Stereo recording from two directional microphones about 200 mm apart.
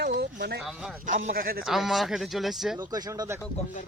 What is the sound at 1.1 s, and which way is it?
Speech, 40° right (ahead or behind).